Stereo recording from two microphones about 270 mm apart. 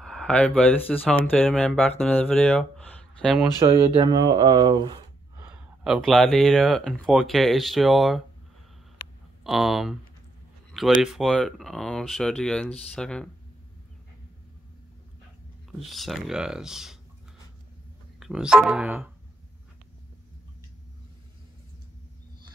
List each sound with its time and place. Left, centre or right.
0.0 s speech: centre
4.0 s speech: centre
5.9 s speech: centre
9.4 s speech: centre
15.9 s speech: centre
18.2 s speech: centre